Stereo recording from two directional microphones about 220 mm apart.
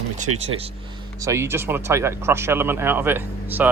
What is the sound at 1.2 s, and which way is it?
Speech, 10° right (ahead or behind).